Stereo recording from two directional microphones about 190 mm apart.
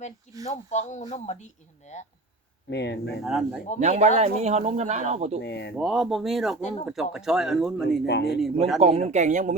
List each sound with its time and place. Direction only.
0.4 s speech: 35° left (ahead or behind)
2.6 s speech: 65° left (ahead or behind)
3.2 s speech: centre (ahead or behind)
3.8 s speech: 35° right (ahead or behind)
5.4 s speech: 65° left (ahead or behind)
5.7 s speech: centre (ahead or behind)
6.6 s speech: 35° left (ahead or behind)
6.8 s speech: centre (ahead or behind)
8.0 s speech: 60° left (ahead or behind)
8.8 s speech: 35° right (ahead or behind)